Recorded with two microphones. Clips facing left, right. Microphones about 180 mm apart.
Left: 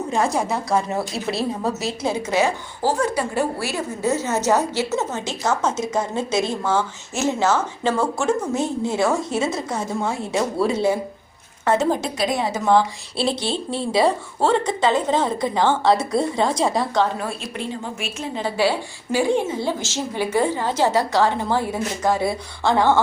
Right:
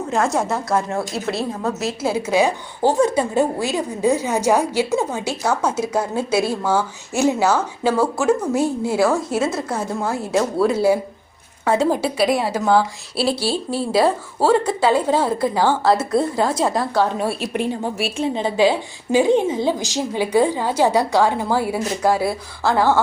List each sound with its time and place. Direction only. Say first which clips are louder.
0.2 s a woman's voice: right 2 dB; centre (ahead or behind)
2.8 s a woman's voice: right 4 dB; 25° right (ahead or behind); by 17.1 s 5° right (ahead or behind)
18.0 s a woman's voice: right 8 dB; 30° right (ahead or behind)
18.4 s a woman's voice: right 2 dB; 20° right (ahead or behind)